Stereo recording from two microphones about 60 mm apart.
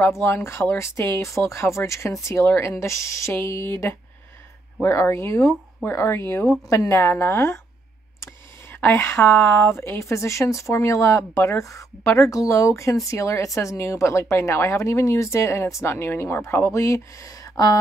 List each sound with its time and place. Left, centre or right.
0.1 s speech: left
5.1 s speech: left
8.8 s speech: left